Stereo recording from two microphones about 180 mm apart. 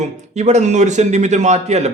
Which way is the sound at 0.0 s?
40° right (ahead or behind).